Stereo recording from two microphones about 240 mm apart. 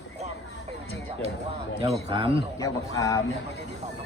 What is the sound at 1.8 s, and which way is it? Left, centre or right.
Speech, right.